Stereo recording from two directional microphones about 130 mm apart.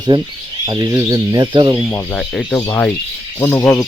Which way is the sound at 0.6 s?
35° right (ahead or behind).